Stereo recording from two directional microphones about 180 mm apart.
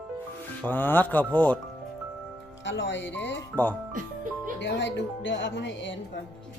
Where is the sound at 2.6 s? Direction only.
90° left.